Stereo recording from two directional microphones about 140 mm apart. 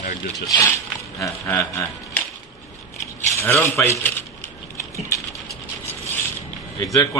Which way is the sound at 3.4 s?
15° left (ahead or behind).